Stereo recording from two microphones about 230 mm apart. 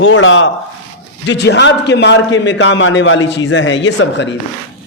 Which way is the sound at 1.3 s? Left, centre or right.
Left.